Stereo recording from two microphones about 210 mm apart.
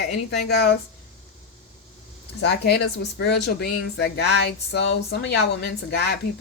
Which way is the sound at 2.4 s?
50° left (ahead or behind).